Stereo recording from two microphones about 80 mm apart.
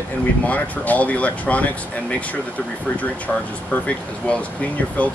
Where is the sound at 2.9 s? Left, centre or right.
Centre.